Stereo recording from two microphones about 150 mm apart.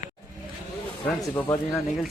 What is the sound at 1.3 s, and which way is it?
Speech, 20° left (ahead or behind).